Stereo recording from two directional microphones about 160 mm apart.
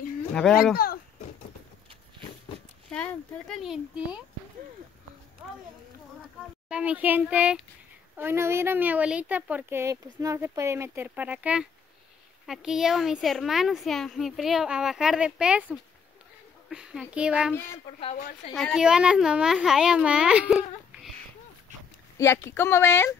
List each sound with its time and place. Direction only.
0.3 s speech: 5° left (ahead or behind)
2.9 s speech: 5° left (ahead or behind)
6.7 s speech: 10° right (ahead or behind)
22.1 s a woman's voice: 15° left (ahead or behind)